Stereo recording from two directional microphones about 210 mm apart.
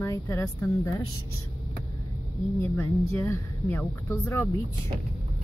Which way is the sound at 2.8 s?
15° left (ahead or behind).